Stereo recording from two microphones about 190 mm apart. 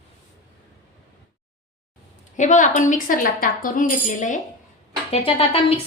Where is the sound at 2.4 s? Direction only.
40° left (ahead or behind).